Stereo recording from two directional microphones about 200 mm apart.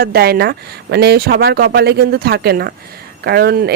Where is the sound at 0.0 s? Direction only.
50° right (ahead or behind).